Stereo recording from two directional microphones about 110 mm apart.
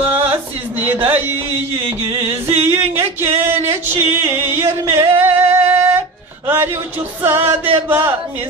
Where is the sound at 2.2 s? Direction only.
20° right (ahead or behind).